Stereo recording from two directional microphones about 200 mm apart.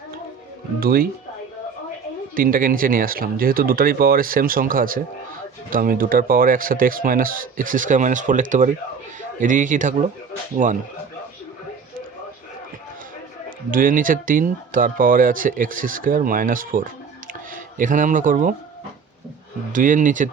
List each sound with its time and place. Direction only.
0.8 s speech: 50° right (ahead or behind)
2.3 s speech: 45° right (ahead or behind)
13.7 s speech: 45° right (ahead or behind)
19.7 s speech: 40° right (ahead or behind)